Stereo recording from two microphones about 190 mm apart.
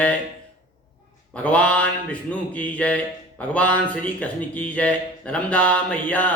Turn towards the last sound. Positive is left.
turn(degrees=5)  # may be behind; listen again after turning